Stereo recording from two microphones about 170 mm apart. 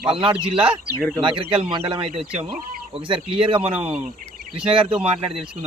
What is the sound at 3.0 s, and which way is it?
Speech, 30° right (ahead or behind).